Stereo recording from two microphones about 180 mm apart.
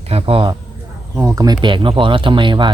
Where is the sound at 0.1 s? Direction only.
30° right (ahead or behind).